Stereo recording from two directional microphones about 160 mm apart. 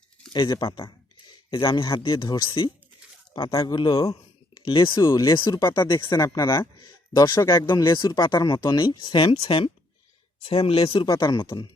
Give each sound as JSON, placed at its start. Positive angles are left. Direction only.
{"t": 0.3, "sound": "speech", "side_deg": 25}